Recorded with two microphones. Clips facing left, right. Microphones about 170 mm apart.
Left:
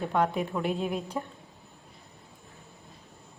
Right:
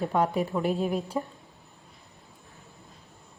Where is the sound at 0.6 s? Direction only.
40° right (ahead or behind).